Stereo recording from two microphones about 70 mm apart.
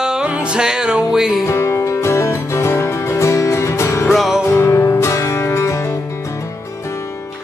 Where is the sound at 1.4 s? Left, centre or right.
Left.